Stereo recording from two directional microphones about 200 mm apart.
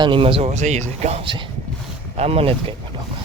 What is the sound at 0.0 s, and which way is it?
A man's voice, 25° right (ahead or behind).